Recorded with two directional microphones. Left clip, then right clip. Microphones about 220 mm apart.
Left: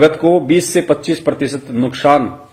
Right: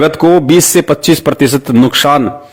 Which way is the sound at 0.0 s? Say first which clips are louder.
Right 3 dB; 50° right (ahead or behind).